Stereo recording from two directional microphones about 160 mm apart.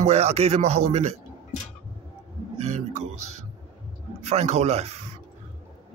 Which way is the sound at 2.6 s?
45° right (ahead or behind).